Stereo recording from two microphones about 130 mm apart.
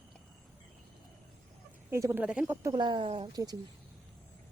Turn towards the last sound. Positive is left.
turn(degrees=-30)  # may be behind; listen again after turning